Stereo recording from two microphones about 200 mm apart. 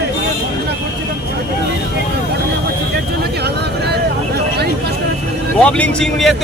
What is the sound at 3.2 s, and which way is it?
Speech, 55° right (ahead or behind).